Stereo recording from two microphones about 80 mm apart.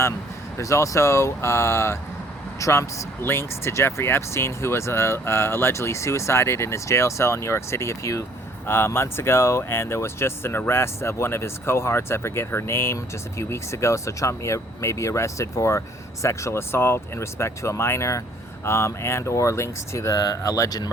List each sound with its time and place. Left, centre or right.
0.5 s speech: left
20.1 s speech: left